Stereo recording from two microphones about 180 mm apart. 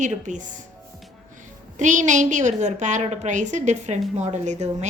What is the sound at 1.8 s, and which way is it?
Speech, 45° right (ahead or behind).